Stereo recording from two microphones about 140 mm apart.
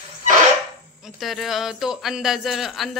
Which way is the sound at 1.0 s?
Centre (ahead or behind).